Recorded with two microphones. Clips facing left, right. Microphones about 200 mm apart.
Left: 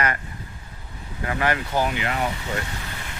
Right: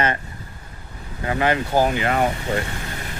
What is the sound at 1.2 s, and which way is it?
Speech, 25° right (ahead or behind).